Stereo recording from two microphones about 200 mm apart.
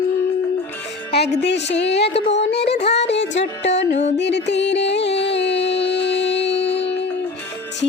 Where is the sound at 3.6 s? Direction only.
60° left (ahead or behind).